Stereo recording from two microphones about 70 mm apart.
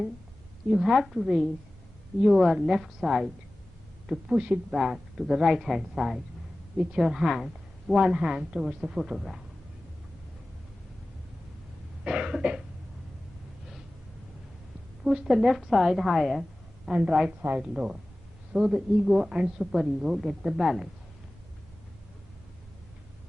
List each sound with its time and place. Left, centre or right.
0.7 s a woman's voice: centre
12.0 s a woman's voice: centre
15.0 s a woman's voice: centre
16.9 s a woman's voice: centre